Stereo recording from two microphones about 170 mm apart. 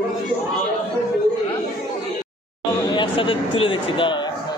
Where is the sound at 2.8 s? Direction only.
25° left (ahead or behind).